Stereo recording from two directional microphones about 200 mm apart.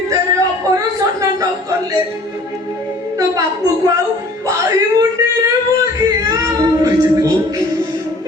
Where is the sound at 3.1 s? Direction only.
15° right (ahead or behind).